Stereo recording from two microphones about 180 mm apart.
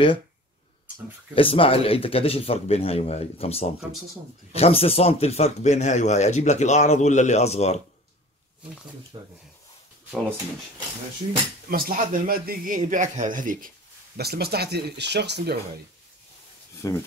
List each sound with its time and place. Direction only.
1.3 s speech: 30° left (ahead or behind)
9.1 s speech: 25° right (ahead or behind)
11.7 s a man's voice: 55° right (ahead or behind)
14.1 s speech: 60° right (ahead or behind)
16.7 s a sound: 15° left (ahead or behind)